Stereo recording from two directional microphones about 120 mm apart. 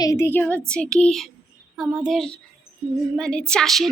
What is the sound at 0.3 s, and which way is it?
A woman's voice, 15° left (ahead or behind).